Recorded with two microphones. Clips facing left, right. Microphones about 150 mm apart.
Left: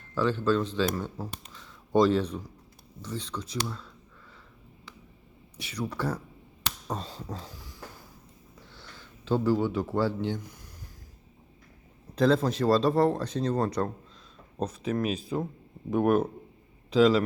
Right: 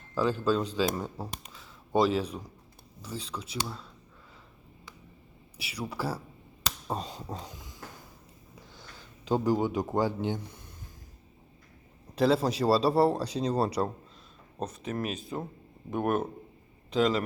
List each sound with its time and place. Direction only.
0.1 s speech: 10° right (ahead or behind)
5.5 s speech: 5° right (ahead or behind)
6.9 s a sound: 15° right (ahead or behind)
8.7 s speech: 15° right (ahead or behind)
12.1 s speech: 5° right (ahead or behind)